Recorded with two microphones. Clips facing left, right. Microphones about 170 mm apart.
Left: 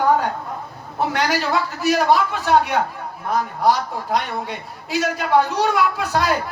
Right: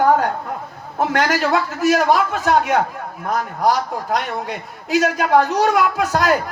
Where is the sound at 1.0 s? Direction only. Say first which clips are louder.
Right 3 dB; 45° right (ahead or behind).